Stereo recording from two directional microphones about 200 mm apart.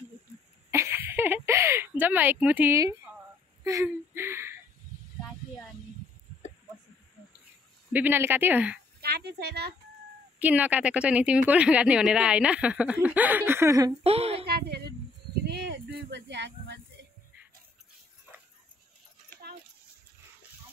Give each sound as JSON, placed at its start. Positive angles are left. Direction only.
{"t": 0.7, "sound": "a sound", "side_deg": -15}
{"t": 7.9, "sound": "a woman's voice", "side_deg": -10}
{"t": 9.0, "sound": "speech", "side_deg": -50}
{"t": 10.4, "sound": "a woman's voice", "side_deg": -5}
{"t": 14.0, "sound": "speech", "side_deg": -30}
{"t": 14.4, "sound": "speech", "side_deg": -50}
{"t": 15.4, "sound": "a sound", "side_deg": -60}